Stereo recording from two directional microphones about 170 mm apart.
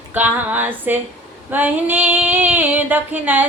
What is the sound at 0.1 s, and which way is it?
Female singing, 10° right (ahead or behind).